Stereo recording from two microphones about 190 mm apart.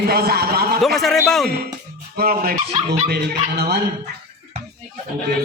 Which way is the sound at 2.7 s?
40° right (ahead or behind).